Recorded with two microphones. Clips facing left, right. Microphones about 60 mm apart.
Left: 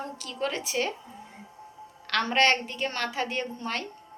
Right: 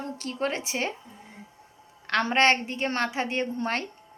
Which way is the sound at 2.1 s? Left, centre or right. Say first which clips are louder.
Right 2 dB; right.